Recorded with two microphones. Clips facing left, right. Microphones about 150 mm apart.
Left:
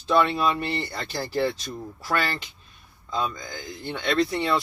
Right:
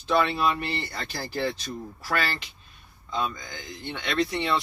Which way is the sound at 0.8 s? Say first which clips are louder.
Left 3 dB; 30° left (ahead or behind).